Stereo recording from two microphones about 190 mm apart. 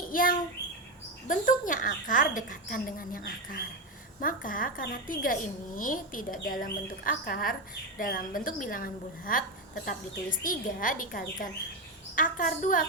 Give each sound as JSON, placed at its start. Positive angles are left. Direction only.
{"t": 0.0, "sound": "a child's voice", "side_deg": 50}